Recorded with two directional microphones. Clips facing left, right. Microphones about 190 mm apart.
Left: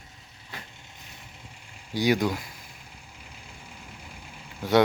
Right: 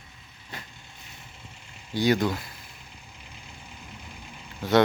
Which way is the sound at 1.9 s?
10° left (ahead or behind).